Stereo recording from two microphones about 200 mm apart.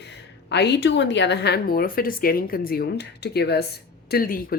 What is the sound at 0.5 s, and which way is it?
A woman's voice, 60° left (ahead or behind).